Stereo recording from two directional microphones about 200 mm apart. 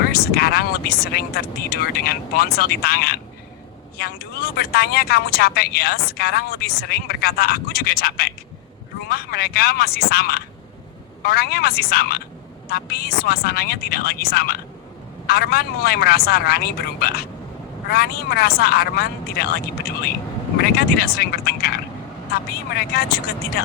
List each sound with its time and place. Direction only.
0.0 s speech: 50° left (ahead or behind)